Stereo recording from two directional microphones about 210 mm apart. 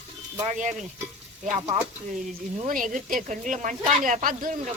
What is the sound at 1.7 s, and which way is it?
Speech, 30° right (ahead or behind).